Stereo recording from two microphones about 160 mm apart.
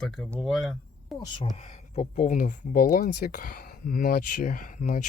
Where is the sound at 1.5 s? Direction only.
45° left (ahead or behind).